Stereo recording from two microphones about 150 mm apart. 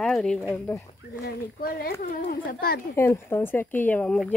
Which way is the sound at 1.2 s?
90° left.